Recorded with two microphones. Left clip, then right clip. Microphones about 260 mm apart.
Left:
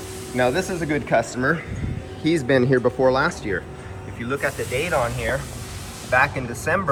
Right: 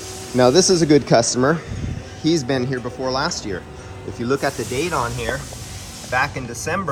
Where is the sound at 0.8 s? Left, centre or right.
Right.